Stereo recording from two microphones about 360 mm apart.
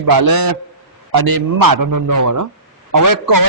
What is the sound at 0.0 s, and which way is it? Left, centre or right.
A man's voice, right.